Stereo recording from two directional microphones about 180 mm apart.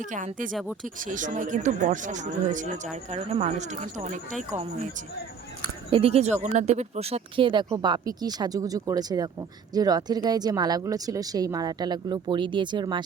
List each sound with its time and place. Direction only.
0.0 s speech: 45° right (ahead or behind)
0.5 s speech: 5° right (ahead or behind)
0.9 s speech: 45° right (ahead or behind)
5.9 s speech: 35° right (ahead or behind)